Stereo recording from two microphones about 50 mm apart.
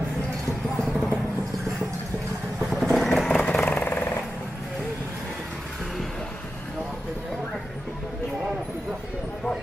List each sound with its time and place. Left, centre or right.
0.7 s music: centre
2.7 s vehicle: centre
3.3 s vehicle: left
3.6 s vehicle: left